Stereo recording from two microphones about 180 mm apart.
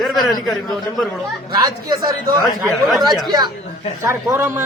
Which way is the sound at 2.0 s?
55° right (ahead or behind).